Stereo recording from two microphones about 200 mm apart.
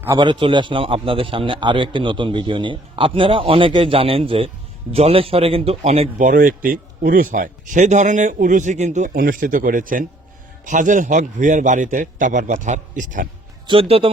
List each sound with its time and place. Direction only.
0.2 s a man's voice: 25° right (ahead or behind); by 13.2 s 40° right (ahead or behind)
13.7 s a man's voice: 30° right (ahead or behind)